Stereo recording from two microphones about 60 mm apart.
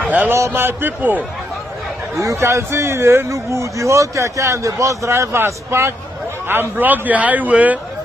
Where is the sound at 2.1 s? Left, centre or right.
Right.